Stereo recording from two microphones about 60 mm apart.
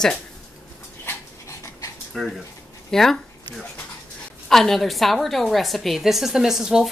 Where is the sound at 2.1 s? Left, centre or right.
Centre.